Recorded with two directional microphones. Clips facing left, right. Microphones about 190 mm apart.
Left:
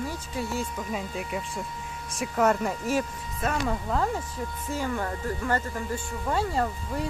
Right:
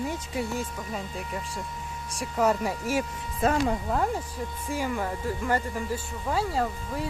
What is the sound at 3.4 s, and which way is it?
Speech, 25° right (ahead or behind).